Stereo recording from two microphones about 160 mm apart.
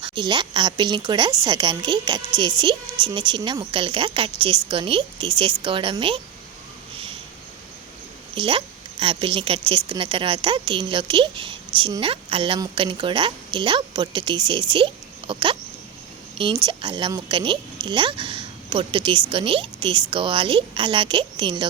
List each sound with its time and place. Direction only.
0.0 s a woman's voice: 30° right (ahead or behind)
8.4 s a woman's voice: 35° right (ahead or behind)
16.6 s a woman's voice: 30° right (ahead or behind)